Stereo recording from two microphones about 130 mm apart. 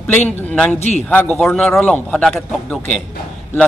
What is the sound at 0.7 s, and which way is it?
Speech, 60° left (ahead or behind).